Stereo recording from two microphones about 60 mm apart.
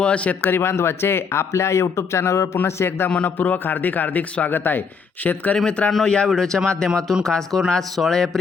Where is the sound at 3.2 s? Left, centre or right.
Left.